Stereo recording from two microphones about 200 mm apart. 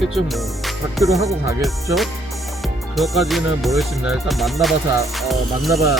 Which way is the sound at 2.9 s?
Centre (ahead or behind).